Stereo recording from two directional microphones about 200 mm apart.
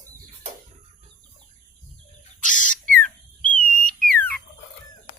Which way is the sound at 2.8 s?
5° left (ahead or behind).